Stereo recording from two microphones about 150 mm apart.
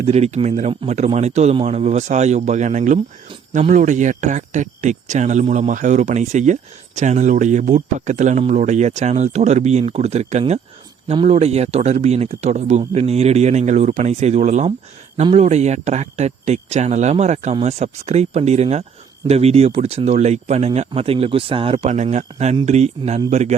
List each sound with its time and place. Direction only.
0.0 s speech: 45° right (ahead or behind)